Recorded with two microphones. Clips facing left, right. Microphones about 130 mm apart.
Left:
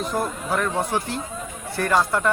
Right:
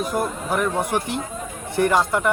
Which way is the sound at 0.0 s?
10° right (ahead or behind).